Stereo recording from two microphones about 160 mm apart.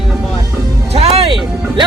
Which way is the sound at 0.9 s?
40° right (ahead or behind).